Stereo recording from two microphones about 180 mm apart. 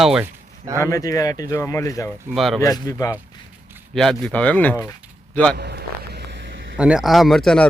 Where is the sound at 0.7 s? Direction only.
15° left (ahead or behind).